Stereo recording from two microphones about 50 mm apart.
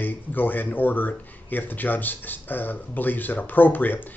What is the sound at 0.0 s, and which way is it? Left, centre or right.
Speech, left.